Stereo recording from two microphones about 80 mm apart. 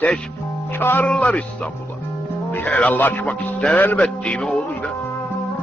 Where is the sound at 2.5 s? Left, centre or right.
Centre.